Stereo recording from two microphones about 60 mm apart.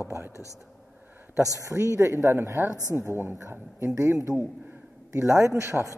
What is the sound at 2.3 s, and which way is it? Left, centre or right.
Speech, right.